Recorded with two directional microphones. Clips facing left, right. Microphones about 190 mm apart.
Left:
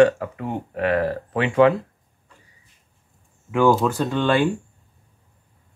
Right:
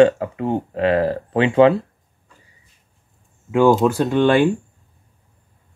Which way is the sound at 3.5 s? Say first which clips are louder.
Right 3 dB; 20° right (ahead or behind).